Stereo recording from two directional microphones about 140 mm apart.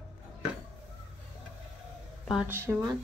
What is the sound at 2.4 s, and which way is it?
Speech, 15° right (ahead or behind).